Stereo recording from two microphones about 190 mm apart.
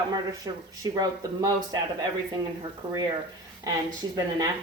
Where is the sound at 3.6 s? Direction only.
20° right (ahead or behind).